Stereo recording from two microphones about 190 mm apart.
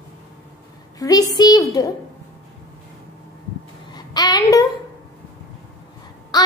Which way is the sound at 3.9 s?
20° left (ahead or behind).